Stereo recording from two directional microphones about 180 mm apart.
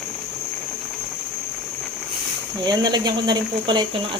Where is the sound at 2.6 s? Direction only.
25° right (ahead or behind).